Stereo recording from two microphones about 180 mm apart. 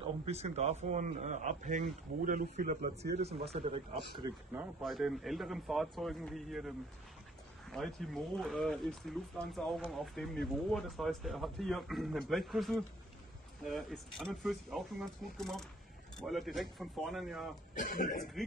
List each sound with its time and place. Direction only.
0.3 s a man's voice: 35° right (ahead or behind)
3.2 s a man's voice: 35° right (ahead or behind)
4.2 s speech: 20° right (ahead or behind)
4.6 s speech: centre (ahead or behind)
7.7 s speech: centre (ahead or behind)
17.7 s speech: 50° left (ahead or behind)